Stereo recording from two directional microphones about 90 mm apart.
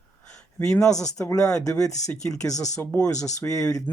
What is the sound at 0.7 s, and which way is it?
Speech, 5° left (ahead or behind).